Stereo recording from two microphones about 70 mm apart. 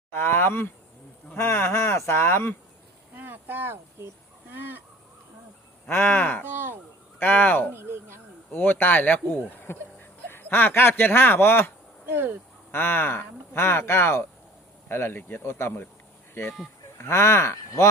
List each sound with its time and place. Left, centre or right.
0.1 s speech: left
3.2 s a sound: right
4.5 s goose: right
5.9 s speech: left
7.7 s speech: right
8.5 s speech: left
12.1 s speech: right
12.7 s speech: left